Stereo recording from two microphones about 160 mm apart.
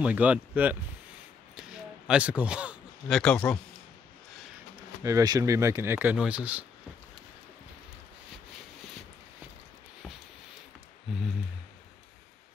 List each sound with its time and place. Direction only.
0.0 s speech: 10° right (ahead or behind)
5.0 s speech: 20° right (ahead or behind)
11.1 s a sound: centre (ahead or behind)